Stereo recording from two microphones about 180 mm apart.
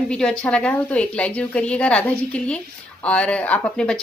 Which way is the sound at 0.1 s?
5° left (ahead or behind).